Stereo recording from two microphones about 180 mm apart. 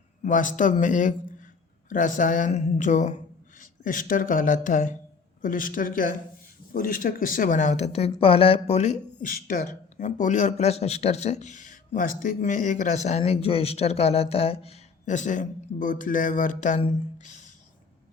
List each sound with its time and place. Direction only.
0.2 s speech: 45° left (ahead or behind)
9.3 s speech: 50° left (ahead or behind)